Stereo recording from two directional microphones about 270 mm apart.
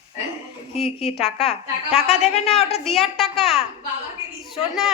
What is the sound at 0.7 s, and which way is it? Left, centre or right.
A woman's voice, left.